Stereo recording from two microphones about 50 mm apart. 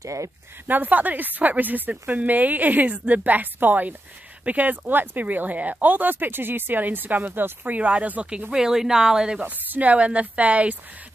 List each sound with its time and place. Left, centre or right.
0.0 s speech: right
0.7 s speech: right; by 9.4 s centre
9.4 s speech: right